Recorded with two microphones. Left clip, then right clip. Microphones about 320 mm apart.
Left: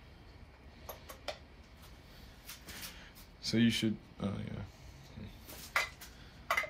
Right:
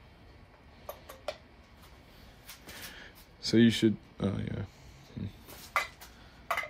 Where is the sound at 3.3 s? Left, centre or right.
Centre.